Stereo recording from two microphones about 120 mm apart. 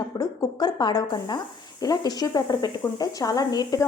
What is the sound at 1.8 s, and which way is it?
A woman's voice, 35° left (ahead or behind).